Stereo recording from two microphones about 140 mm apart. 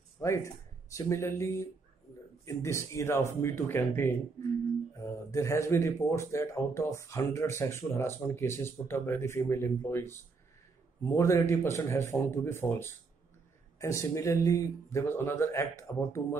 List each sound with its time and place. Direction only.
0.2 s speech: 20° left (ahead or behind)